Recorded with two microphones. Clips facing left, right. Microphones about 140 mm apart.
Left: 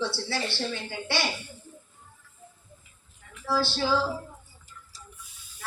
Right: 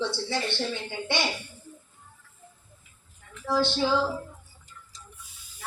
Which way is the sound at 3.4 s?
20° right (ahead or behind).